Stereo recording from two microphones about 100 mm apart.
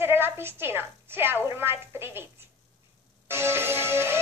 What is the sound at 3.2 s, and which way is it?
Speech, 25° right (ahead or behind).